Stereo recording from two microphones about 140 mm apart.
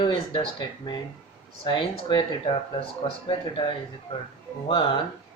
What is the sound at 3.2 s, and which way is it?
Speech, 35° left (ahead or behind).